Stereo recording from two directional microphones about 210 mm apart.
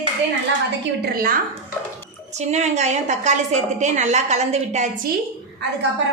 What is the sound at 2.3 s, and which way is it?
A woman's voice, 30° right (ahead or behind).